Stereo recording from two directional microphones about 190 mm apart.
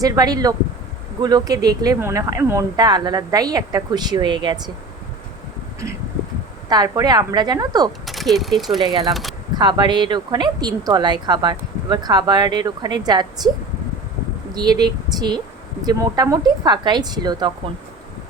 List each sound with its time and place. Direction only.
0.0 s speech: 20° right (ahead or behind)
6.7 s speech: 20° right (ahead or behind)
8.0 s speech: centre (ahead or behind)
9.6 s speech: 25° right (ahead or behind)
14.5 s speech: 20° right (ahead or behind)